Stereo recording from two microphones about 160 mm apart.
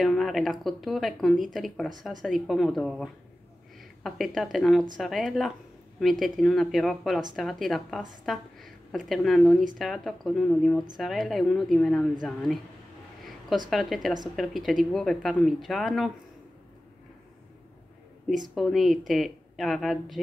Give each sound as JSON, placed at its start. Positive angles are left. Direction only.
{"t": 0.0, "sound": "speech", "side_deg": 0}
{"t": 13.7, "sound": "speech", "side_deg": 0}
{"t": 18.5, "sound": "speech", "side_deg": 0}